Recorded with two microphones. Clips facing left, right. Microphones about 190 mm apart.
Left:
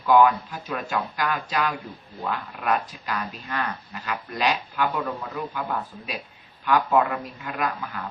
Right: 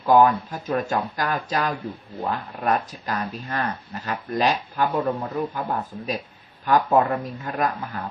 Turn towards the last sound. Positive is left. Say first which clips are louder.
# right 3 dB
turn(degrees=-40)  # may be behind; listen again after turning